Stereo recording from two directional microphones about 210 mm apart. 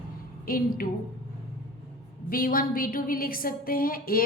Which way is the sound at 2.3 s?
40° left (ahead or behind).